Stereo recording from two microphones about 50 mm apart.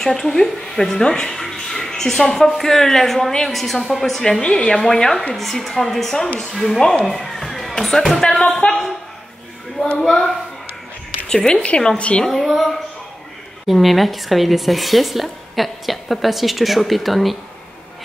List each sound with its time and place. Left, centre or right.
0.0 s speech: centre
4.4 s a woman's voice: left
10.0 s speech: centre; by 12.3 s left
12.3 s speech: centre